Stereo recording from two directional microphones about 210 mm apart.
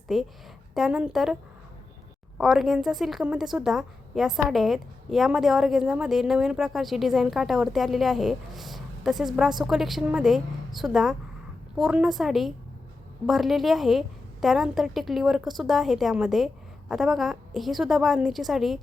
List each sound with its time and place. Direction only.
0.1 s a woman's voice: centre (ahead or behind)
2.4 s a woman's voice: centre (ahead or behind)